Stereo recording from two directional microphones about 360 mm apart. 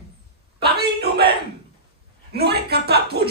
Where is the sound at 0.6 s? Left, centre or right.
Right.